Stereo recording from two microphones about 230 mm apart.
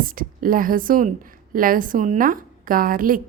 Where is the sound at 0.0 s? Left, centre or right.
Right.